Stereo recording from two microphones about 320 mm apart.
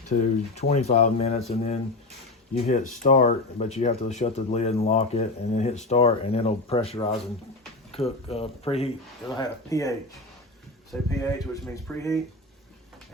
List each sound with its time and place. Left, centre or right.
0.1 s speech: left
3.0 s speech: left
11.2 s speech: centre